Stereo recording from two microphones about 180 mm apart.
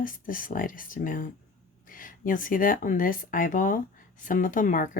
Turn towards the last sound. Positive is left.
turn(degrees=45)  # may be behind; listen again after turning